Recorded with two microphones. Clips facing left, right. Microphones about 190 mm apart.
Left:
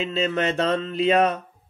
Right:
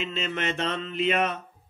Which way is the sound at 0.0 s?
35° left (ahead or behind).